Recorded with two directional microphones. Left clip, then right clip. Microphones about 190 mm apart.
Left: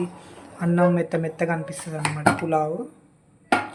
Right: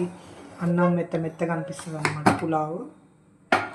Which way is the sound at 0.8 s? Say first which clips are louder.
Left 3 dB; 35° left (ahead or behind).